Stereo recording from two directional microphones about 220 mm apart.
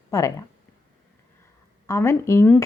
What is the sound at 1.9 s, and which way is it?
Speech, 15° left (ahead or behind).